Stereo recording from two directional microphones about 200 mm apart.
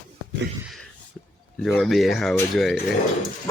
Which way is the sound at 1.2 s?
5° left (ahead or behind).